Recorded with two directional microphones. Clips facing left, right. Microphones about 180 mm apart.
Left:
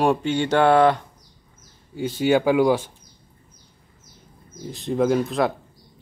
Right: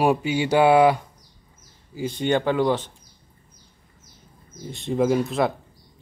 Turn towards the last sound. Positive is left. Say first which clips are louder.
# left 1 dB
turn(degrees=0)  # may be behind; listen again after turning